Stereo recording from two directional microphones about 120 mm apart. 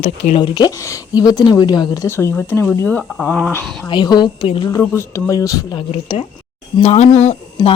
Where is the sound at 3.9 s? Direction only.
40° left (ahead or behind).